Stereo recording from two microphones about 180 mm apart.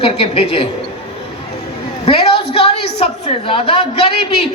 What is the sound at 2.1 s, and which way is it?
A woman's voice, 30° left (ahead or behind).